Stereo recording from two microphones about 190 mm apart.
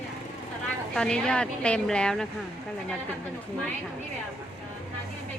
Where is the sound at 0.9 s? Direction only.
5° left (ahead or behind).